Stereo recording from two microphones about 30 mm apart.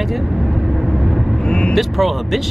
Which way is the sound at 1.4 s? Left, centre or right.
Left.